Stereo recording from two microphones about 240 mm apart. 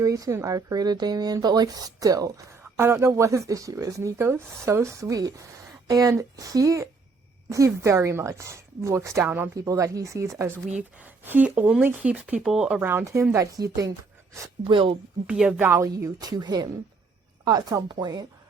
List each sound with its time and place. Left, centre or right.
0.0 s speech: centre
15.3 s speech: centre